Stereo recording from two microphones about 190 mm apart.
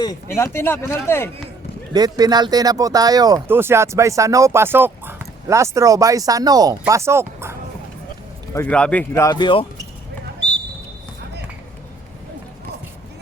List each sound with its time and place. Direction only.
0.0 s speech: 15° left (ahead or behind)
1.9 s speech: 20° right (ahead or behind)
8.5 s speech: 5° left (ahead or behind); by 9.6 s 25° left (ahead or behind)